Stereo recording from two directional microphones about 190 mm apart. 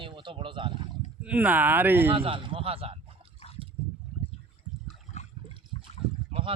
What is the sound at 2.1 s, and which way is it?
Speech, 30° right (ahead or behind).